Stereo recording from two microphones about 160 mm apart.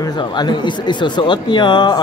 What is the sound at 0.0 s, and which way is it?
Speech, 25° left (ahead or behind).